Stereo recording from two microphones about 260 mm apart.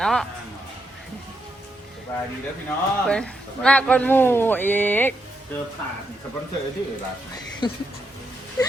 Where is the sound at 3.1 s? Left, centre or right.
Centre.